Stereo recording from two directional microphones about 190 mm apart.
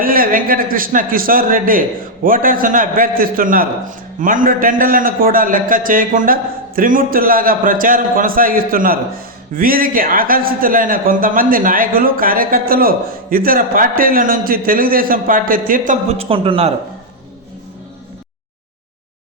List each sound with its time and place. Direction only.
0.0 s a man's voice: 50° right (ahead or behind); by 16.7 s 30° right (ahead or behind)